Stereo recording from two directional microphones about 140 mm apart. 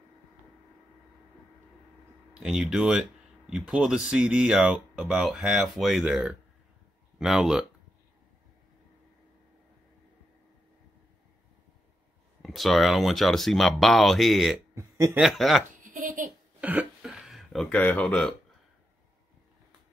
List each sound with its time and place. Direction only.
2.3 s speech: 5° right (ahead or behind)
12.4 s speech: centre (ahead or behind)
14.8 s speech: 20° right (ahead or behind)
15.1 s speech: centre (ahead or behind)
15.8 s a sound: 75° right (ahead or behind)
16.6 s cough: 10° right (ahead or behind)
17.0 s a sound: centre (ahead or behind)